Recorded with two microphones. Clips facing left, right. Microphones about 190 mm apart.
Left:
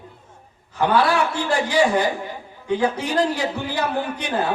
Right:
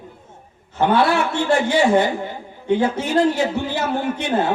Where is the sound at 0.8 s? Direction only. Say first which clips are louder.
Right 2 dB; 25° right (ahead or behind).